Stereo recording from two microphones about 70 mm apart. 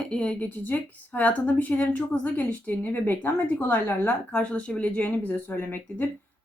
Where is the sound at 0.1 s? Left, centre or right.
Centre.